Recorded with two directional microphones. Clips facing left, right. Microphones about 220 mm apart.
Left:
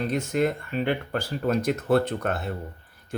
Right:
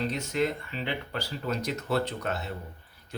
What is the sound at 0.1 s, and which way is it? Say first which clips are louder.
Speech: left 4 dB; 50° left (ahead or behind).